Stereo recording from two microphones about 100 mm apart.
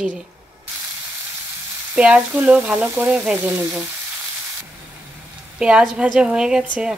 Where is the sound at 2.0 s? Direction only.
10° right (ahead or behind).